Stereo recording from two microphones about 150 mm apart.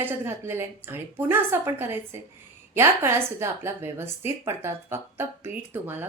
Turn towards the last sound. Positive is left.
turn(degrees=-15)  # may be behind; listen again after turning